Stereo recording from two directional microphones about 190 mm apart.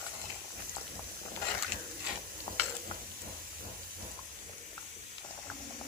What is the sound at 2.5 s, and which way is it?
Stir, 20° left (ahead or behind).